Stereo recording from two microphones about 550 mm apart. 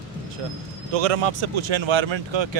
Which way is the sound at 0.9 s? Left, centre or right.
Right.